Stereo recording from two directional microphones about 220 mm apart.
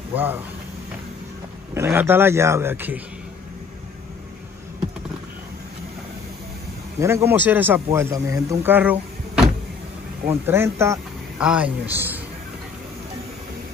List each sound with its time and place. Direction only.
0.1 s speech: 10° right (ahead or behind)
1.7 s a man's voice: 10° right (ahead or behind)
7.0 s a man's voice: 10° right (ahead or behind)
10.2 s speech: 10° right (ahead or behind)